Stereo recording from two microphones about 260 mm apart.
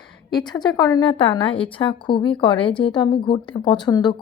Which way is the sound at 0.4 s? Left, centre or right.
Centre.